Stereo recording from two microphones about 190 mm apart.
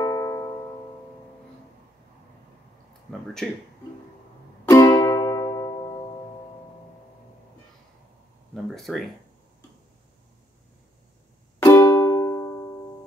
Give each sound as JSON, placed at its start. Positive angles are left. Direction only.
{"t": 0.0, "sound": "music", "side_deg": 20}
{"t": 4.6, "sound": "music", "side_deg": 20}
{"t": 8.7, "sound": "speech", "side_deg": 0}
{"t": 11.6, "sound": "music", "side_deg": 15}